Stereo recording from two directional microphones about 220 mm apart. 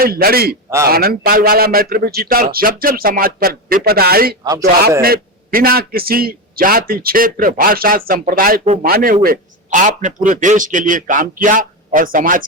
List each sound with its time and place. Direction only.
0.0 s a man's voice: 45° right (ahead or behind)
8.6 s speech: 30° right (ahead or behind)
8.9 s a man's voice: 40° right (ahead or behind)